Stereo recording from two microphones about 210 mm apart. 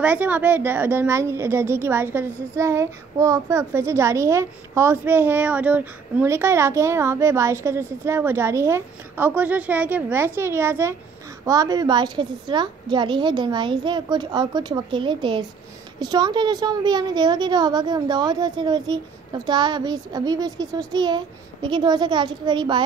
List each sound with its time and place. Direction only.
0.0 s a woman's voice: 10° right (ahead or behind)